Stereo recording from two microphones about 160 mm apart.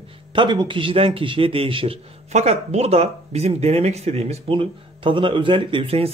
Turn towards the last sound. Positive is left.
turn(degrees=-35)  # may be behind; listen again after turning